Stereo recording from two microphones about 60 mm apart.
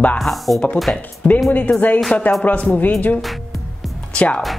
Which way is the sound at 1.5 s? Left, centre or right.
Left.